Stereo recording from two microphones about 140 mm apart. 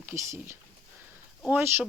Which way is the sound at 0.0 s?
15° right (ahead or behind).